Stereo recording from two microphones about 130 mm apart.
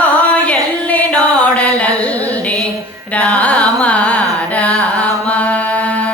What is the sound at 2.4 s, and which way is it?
Music, 5° left (ahead or behind).